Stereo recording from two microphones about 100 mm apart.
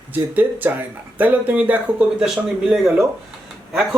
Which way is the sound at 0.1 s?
20° right (ahead or behind).